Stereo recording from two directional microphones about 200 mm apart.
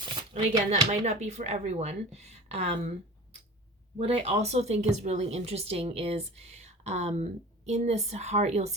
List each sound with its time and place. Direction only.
0.0 s a sound: 25° right (ahead or behind)
0.9 s speech: 35° right (ahead or behind)
3.9 s speech: 30° right (ahead or behind)